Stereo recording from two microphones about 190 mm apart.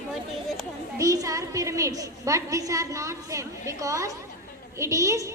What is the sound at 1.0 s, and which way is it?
A woman's voice, 20° right (ahead or behind).